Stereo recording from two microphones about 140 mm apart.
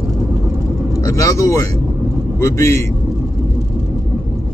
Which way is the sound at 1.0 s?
20° left (ahead or behind).